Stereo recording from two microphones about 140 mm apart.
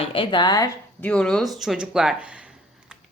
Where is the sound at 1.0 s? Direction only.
10° left (ahead or behind); by 2.4 s 10° right (ahead or behind).